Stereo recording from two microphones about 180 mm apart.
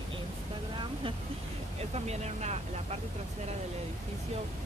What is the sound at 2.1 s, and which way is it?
Speech, 35° right (ahead or behind).